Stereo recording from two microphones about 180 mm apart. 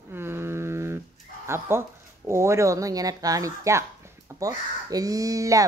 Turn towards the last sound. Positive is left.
turn(degrees=-20)  # may be behind; listen again after turning